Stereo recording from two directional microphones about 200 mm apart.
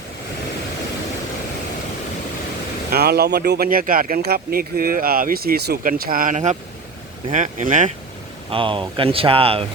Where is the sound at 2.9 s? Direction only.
50° right (ahead or behind).